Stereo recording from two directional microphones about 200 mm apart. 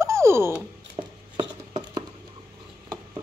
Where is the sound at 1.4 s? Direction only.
25° right (ahead or behind).